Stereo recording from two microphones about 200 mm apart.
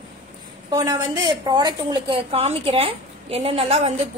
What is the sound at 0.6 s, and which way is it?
A woman's voice, 20° right (ahead or behind).